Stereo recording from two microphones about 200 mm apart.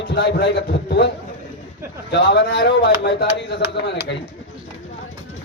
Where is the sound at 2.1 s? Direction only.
60° left (ahead or behind).